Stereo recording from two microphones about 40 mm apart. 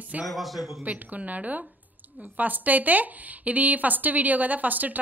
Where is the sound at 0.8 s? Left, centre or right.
Right.